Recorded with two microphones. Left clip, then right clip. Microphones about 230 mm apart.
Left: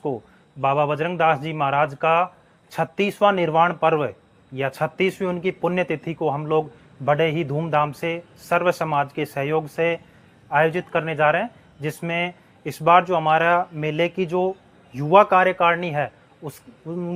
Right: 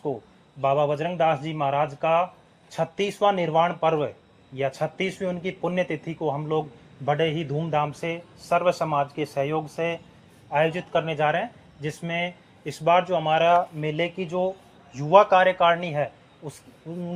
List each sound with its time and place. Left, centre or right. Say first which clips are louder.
0.6 s a man's voice: left 2 dB; left